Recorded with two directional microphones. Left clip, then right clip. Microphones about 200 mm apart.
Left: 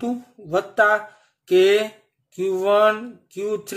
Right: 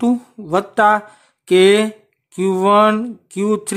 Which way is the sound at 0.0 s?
55° right (ahead or behind).